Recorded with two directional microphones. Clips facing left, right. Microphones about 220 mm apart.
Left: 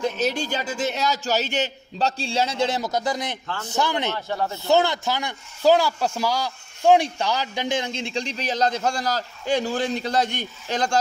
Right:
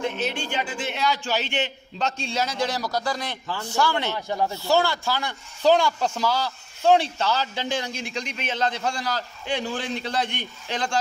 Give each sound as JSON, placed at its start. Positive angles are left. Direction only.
{"t": 0.0, "sound": "a man's voice", "side_deg": 40}
{"t": 4.1, "sound": "speech", "side_deg": -15}
{"t": 4.6, "sound": "speech", "side_deg": 20}